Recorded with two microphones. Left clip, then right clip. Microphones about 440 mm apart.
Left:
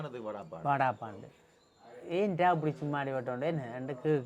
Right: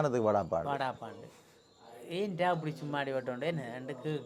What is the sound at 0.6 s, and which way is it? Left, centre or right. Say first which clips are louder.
Speech: left 5 dB; left.